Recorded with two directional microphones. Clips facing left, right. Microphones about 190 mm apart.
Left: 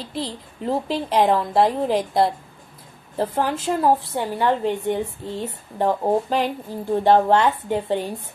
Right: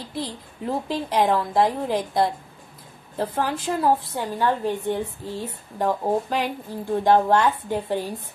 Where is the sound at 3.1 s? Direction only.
15° left (ahead or behind).